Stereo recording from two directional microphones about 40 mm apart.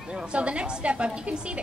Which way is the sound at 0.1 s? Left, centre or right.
Right.